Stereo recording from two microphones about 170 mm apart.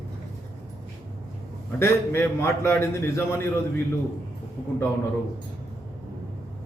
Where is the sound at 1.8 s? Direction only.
15° left (ahead or behind).